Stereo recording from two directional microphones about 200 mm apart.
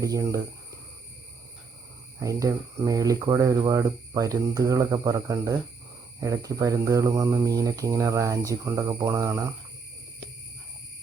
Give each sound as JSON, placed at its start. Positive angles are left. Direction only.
{"t": 0.0, "sound": "speech", "side_deg": -15}
{"t": 2.1, "sound": "speech", "side_deg": -15}